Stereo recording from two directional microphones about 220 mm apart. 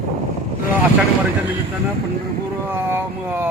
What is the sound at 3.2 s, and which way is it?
Vehicle, 10° right (ahead or behind).